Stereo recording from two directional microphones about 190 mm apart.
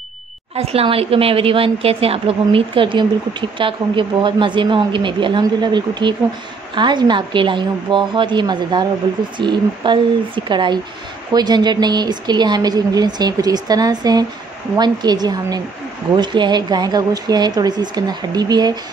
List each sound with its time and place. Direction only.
0.6 s a woman's voice: 30° right (ahead or behind)